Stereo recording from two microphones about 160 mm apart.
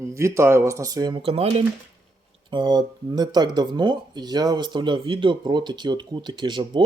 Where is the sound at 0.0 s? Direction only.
20° right (ahead or behind); by 1.6 s 40° right (ahead or behind).